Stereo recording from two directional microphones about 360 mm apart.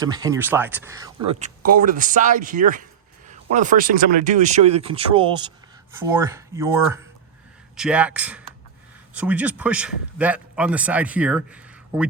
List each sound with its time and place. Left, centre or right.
0.0 s a man's voice: centre